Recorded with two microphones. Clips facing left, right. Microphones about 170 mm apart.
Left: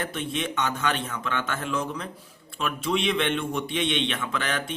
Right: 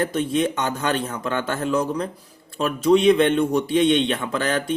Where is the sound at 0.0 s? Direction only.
40° right (ahead or behind).